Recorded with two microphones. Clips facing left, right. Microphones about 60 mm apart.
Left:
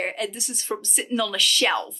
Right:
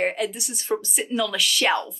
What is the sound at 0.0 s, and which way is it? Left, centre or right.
Speech, centre.